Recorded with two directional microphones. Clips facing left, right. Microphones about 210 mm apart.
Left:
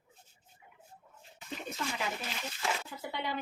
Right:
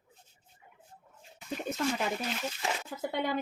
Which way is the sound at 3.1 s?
50° right (ahead or behind).